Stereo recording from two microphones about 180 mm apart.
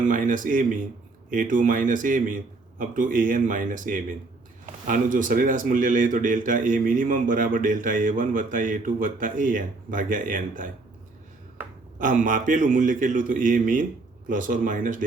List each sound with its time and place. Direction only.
0.1 s speech: 45° right (ahead or behind)
11.9 s speech: 50° right (ahead or behind)